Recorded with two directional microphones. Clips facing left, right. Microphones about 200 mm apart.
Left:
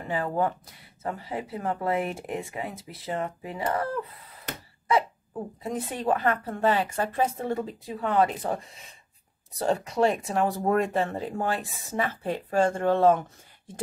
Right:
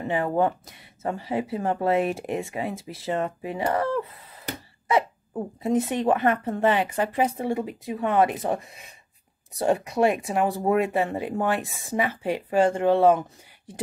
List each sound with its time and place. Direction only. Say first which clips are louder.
0.0 s speech: right 4 dB; 20° right (ahead or behind)
9.6 s speech: right 2 dB; 10° right (ahead or behind)